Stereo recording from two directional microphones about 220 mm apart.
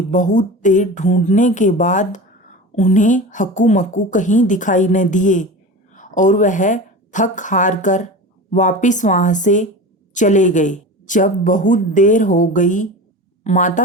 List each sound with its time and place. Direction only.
0.1 s a woman's voice: 35° left (ahead or behind)